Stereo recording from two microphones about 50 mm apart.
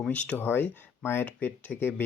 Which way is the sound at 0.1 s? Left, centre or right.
Left.